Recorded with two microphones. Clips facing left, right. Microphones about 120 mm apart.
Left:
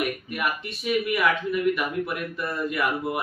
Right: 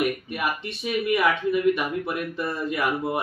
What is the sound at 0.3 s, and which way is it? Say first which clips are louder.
Speech: right 1 dB; 25° right (ahead or behind).